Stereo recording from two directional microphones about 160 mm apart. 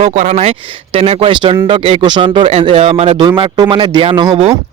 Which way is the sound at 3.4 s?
30° right (ahead or behind).